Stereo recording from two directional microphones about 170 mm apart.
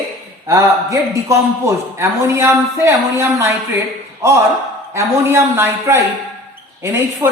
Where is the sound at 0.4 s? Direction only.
20° right (ahead or behind).